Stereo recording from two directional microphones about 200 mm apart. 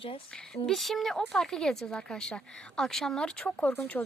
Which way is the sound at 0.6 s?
Centre (ahead or behind).